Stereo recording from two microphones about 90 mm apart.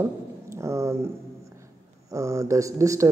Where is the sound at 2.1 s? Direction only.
35° right (ahead or behind).